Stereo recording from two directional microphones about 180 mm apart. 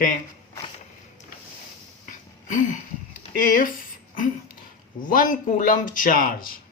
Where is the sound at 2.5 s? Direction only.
45° left (ahead or behind).